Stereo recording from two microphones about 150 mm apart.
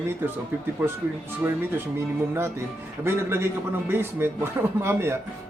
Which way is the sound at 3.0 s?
15° right (ahead or behind).